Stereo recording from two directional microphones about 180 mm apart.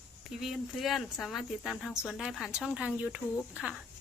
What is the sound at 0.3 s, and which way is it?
A woman's voice, centre (ahead or behind).